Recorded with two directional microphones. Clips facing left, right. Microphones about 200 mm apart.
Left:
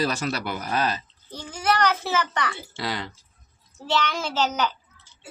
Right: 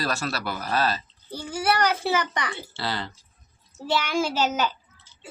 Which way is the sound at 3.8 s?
10° right (ahead or behind).